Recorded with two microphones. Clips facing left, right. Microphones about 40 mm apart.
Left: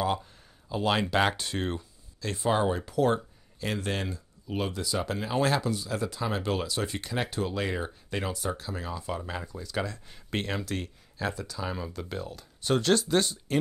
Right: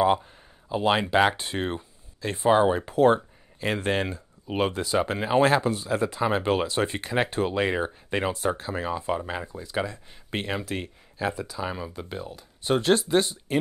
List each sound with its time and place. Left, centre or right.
0.0 s speech: right